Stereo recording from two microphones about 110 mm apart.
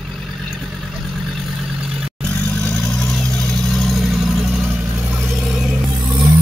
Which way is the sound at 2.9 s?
5° left (ahead or behind).